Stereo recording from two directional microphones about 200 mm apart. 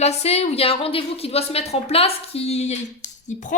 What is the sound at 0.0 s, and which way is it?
A woman's voice, 35° left (ahead or behind).